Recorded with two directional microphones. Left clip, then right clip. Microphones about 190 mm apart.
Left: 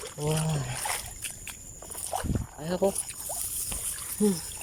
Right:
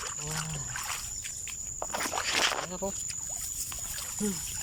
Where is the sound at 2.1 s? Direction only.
35° left (ahead or behind).